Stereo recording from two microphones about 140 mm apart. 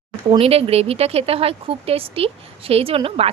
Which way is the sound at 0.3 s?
45° right (ahead or behind).